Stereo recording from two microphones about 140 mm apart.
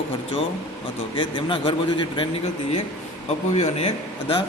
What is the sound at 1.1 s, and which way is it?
Speech, 35° left (ahead or behind).